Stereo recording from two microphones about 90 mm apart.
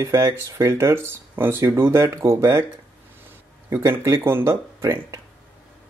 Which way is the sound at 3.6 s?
30° right (ahead or behind).